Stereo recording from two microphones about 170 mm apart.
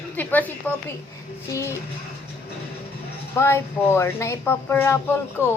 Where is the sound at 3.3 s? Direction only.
15° left (ahead or behind).